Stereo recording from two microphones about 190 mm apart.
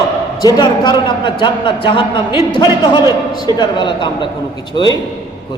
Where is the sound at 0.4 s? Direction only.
20° left (ahead or behind).